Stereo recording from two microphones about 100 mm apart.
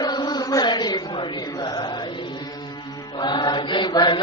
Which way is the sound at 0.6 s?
45° left (ahead or behind).